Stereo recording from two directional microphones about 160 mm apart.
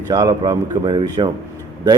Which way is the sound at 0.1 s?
20° right (ahead or behind).